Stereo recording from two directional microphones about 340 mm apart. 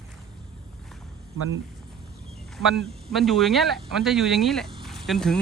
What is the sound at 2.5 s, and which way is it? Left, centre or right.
Speech, centre.